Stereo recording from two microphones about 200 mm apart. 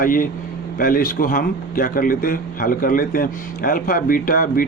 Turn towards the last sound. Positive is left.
turn(degrees=45)  # may be behind; listen again after turning